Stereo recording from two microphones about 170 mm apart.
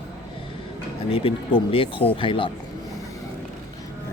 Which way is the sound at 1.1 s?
35° left (ahead or behind).